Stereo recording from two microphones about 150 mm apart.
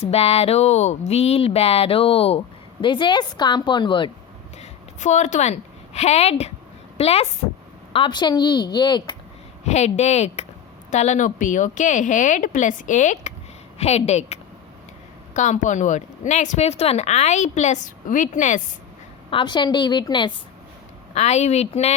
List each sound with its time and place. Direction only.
0.0 s speech: 40° left (ahead or behind)
4.5 s a woman's voice: 50° left (ahead or behind)
7.9 s a woman's voice: 30° left (ahead or behind)
9.6 s a woman's voice: 50° left (ahead or behind)
13.7 s a woman's voice: 45° left (ahead or behind)
19.3 s speech: 30° left (ahead or behind)
21.1 s a woman's voice: 45° left (ahead or behind)